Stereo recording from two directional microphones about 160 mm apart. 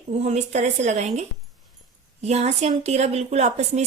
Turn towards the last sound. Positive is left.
turn(degrees=-45)  # may be behind; listen again after turning